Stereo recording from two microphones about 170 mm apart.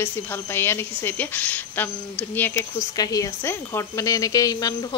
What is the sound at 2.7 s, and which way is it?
Speech, 20° left (ahead or behind).